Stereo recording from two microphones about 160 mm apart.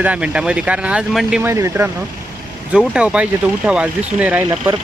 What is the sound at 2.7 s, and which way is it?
Speech, 5° right (ahead or behind).